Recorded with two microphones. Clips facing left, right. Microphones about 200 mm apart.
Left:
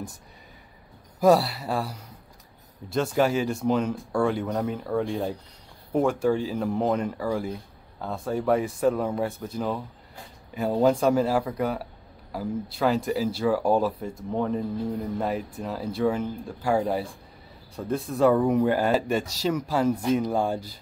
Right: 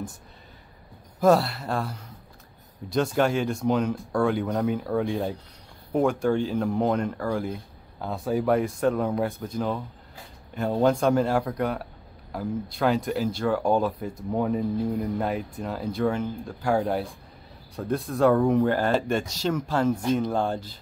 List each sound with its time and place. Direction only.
1.2 s speech: 5° left (ahead or behind)
14.3 s speech: 5° right (ahead or behind); by 20.8 s 10° left (ahead or behind)